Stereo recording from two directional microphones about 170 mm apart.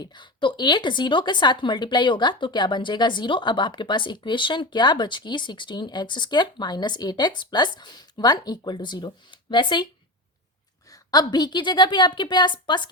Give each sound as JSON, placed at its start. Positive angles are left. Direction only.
{"t": 0.0, "sound": "a woman's voice", "side_deg": 25}
{"t": 10.9, "sound": "a woman's voice", "side_deg": 25}